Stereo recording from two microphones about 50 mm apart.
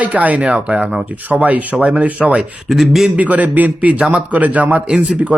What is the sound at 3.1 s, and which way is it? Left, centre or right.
A man's voice, right.